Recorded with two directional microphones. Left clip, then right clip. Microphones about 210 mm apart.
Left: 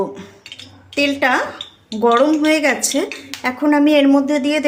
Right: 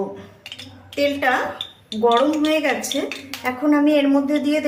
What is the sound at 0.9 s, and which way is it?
Speech, 50° left (ahead or behind).